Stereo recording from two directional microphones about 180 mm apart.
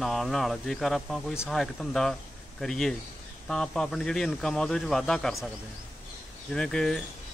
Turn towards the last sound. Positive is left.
turn(degrees=5)  # may be behind; listen again after turning